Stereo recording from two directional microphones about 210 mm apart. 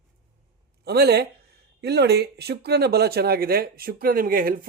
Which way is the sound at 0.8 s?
50° right (ahead or behind).